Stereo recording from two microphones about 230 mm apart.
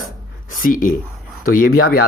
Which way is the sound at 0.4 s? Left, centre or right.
Left.